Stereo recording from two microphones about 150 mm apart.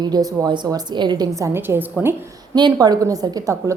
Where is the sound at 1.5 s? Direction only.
15° right (ahead or behind).